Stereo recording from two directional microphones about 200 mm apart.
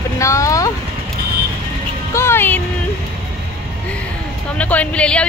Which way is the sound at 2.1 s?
10° left (ahead or behind).